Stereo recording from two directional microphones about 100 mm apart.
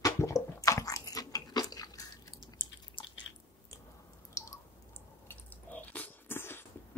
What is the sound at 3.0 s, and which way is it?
Drip, 55° left (ahead or behind).